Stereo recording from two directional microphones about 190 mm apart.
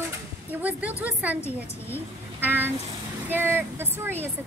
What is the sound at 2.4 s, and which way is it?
Speech, 10° right (ahead or behind).